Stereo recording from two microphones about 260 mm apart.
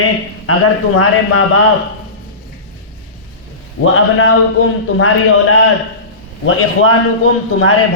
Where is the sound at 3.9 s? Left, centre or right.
Left.